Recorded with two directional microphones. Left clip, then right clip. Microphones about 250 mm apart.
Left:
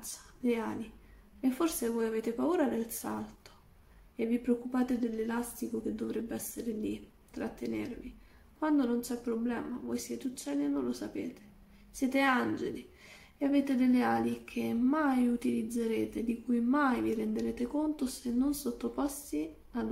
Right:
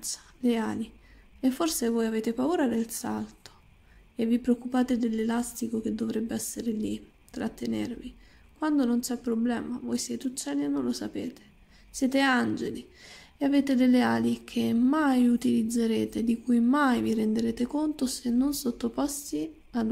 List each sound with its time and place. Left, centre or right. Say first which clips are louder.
0.0 s a woman's voice: right 6 dB; right